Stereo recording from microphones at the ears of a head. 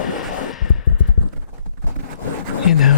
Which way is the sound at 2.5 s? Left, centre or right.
Left.